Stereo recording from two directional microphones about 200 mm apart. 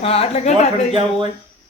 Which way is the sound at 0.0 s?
30° left (ahead or behind).